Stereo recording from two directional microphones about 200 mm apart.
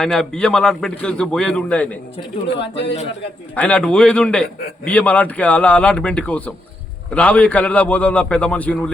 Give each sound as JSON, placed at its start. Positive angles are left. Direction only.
{"t": 0.0, "sound": "speech", "side_deg": 0}
{"t": 3.5, "sound": "a man's voice", "side_deg": 5}